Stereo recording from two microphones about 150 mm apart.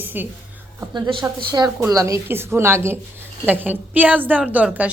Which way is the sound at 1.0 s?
35° right (ahead or behind).